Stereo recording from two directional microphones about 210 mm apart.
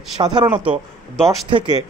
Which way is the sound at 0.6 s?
5° right (ahead or behind).